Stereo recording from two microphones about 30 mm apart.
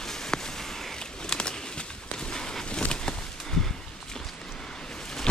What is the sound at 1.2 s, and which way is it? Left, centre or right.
Pigeon, left.